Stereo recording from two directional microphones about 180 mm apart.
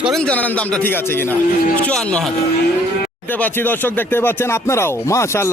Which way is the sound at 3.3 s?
10° left (ahead or behind).